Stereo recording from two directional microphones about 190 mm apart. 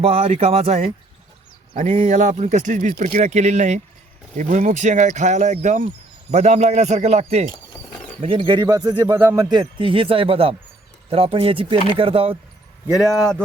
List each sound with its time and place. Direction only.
0.0 s speech: 30° right (ahead or behind)